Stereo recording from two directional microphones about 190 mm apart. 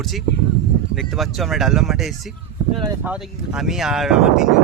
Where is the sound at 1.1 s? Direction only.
Centre (ahead or behind).